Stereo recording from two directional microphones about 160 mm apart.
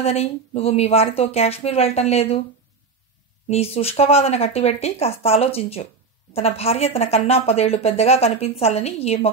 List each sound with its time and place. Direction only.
0.0 s a woman's voice: 40° left (ahead or behind)
3.4 s a woman's voice: 40° left (ahead or behind)